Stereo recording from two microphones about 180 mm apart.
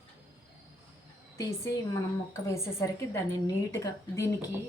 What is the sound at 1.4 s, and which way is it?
A woman's voice, 20° left (ahead or behind).